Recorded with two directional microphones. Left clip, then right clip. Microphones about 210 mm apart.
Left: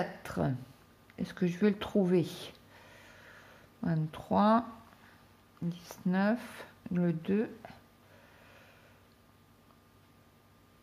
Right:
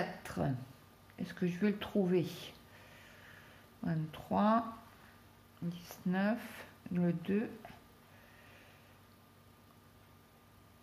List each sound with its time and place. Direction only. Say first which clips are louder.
0.2 s a sound: left 4 dB; 45° left (ahead or behind)
1.1 s speech: left 4 dB; 45° left (ahead or behind)
5.7 s speech: left 4 dB; 45° left (ahead or behind)